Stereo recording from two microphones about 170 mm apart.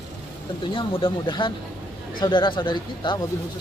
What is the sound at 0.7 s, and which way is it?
A man's voice, 30° left (ahead or behind).